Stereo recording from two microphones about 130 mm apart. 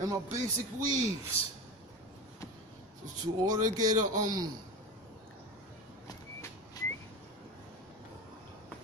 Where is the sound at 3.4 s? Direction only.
30° right (ahead or behind).